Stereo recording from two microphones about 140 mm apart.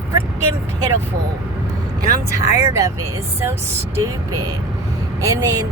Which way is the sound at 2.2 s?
20° right (ahead or behind).